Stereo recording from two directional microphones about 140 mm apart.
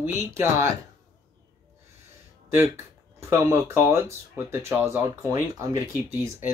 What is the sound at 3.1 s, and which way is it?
Speech, 20° right (ahead or behind).